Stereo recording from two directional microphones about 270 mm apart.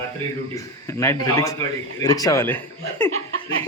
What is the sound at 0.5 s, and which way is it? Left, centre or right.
Speech, centre.